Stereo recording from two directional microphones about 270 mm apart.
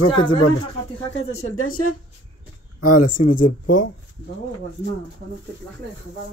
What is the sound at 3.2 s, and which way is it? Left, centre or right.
Speech, left.